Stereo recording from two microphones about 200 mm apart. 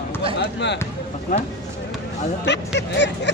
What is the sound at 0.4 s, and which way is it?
Speech, 60° left (ahead or behind).